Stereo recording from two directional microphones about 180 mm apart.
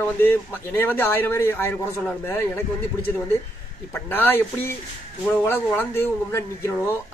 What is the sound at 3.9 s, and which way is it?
A man's voice, 10° left (ahead or behind).